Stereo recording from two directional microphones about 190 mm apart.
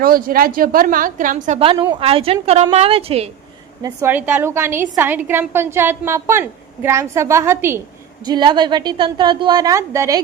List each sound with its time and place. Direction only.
0.0 s a woman's voice: 50° right (ahead or behind)
1.5 s a woman's voice: 25° right (ahead or behind)
3.8 s a woman's voice: 10° right (ahead or behind)